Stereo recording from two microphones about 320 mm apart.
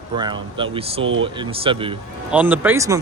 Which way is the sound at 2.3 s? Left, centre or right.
Centre.